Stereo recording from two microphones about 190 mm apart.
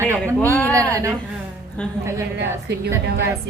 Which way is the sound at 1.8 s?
5° left (ahead or behind).